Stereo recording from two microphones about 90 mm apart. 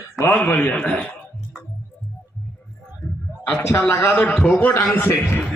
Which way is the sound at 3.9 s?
30° left (ahead or behind).